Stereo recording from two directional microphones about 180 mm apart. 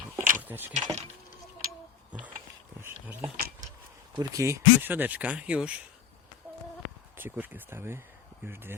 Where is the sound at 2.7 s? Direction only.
10° right (ahead or behind).